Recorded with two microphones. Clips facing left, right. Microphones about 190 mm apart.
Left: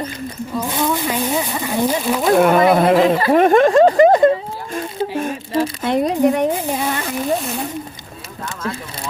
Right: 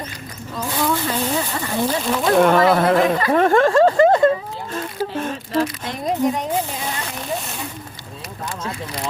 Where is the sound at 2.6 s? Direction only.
20° left (ahead or behind).